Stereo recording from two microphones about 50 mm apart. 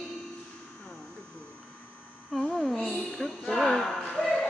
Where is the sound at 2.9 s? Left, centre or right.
Centre.